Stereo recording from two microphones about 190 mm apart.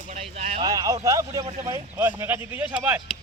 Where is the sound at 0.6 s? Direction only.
20° right (ahead or behind).